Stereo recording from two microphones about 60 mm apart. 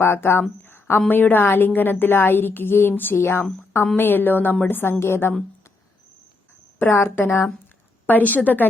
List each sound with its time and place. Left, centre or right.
0.0 s a woman's voice: left
0.6 s a sound: left
1.0 s a woman's voice: left
6.7 s a woman's voice: left